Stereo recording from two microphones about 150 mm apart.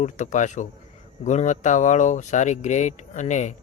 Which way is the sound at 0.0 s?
55° left (ahead or behind).